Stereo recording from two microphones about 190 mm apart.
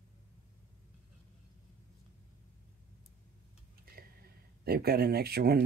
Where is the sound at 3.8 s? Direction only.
50° right (ahead or behind).